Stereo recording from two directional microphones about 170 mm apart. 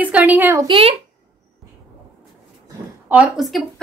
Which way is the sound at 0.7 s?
35° right (ahead or behind).